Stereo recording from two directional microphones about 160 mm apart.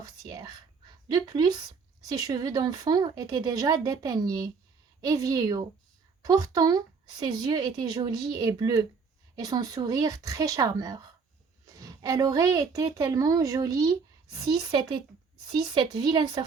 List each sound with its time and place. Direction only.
0.0 s speech: 20° right (ahead or behind)